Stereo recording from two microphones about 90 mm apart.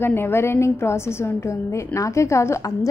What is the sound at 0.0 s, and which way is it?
A woman's voice, 25° left (ahead or behind).